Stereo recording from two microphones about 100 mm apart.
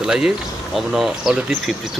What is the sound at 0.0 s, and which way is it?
Speech, 5° right (ahead or behind).